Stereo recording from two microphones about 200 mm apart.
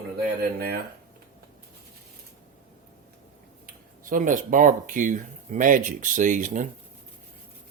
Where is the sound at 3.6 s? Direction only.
40° right (ahead or behind).